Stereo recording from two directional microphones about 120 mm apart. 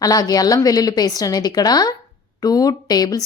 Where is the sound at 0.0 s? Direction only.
30° left (ahead or behind).